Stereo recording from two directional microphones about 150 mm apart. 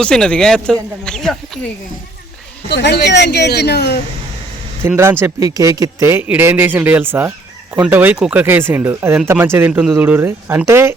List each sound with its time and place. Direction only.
0.0 s speech: 5° left (ahead or behind)
2.6 s a woman's voice: 90° left
4.9 s speech: 15° right (ahead or behind)